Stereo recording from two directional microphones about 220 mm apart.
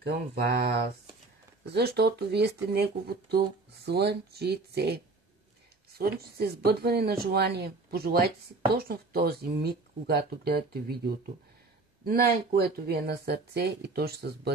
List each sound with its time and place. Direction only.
0.0 s speech: 45° right (ahead or behind)